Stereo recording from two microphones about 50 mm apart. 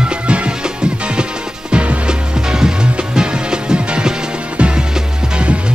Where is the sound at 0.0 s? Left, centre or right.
Right.